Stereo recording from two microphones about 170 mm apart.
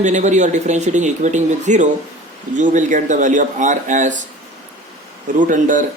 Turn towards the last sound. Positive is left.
turn(degrees=-50)  # may be behind; listen again after turning